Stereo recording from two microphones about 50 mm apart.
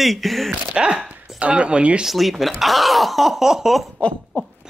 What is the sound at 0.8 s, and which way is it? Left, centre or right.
Speech, centre.